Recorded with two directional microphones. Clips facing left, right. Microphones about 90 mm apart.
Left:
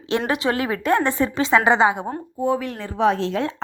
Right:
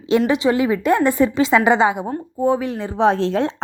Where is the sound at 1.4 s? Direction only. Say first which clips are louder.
Left 1 dB; 30° left (ahead or behind).